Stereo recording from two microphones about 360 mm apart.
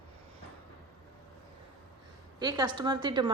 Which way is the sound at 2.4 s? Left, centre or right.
Centre.